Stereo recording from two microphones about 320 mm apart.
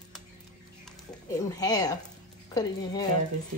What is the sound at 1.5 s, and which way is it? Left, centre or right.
Speech, centre.